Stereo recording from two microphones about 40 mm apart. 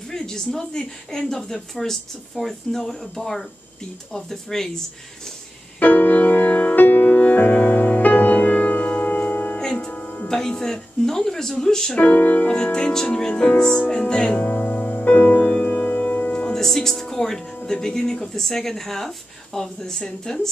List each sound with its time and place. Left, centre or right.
0.1 s speech: centre
5.8 s music: left
6.7 s music: left
9.6 s music: centre
10.2 s speech: centre
12.0 s music: left
12.7 s speech: centre
14.5 s music: left
16.5 s music: centre
17.6 s speech: centre